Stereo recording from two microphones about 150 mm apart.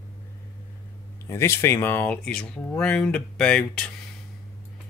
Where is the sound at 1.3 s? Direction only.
20° left (ahead or behind).